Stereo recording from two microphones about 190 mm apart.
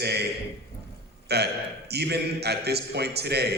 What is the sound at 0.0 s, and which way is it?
Speech, 60° right (ahead or behind).